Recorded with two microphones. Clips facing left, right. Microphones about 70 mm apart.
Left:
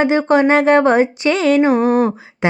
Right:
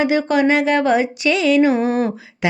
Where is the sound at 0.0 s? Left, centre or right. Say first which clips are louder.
Left 3 dB; left.